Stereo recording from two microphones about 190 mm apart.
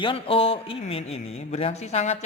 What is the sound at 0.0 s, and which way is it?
Speech, 30° left (ahead or behind).